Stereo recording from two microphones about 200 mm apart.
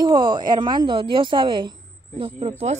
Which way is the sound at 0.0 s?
25° right (ahead or behind).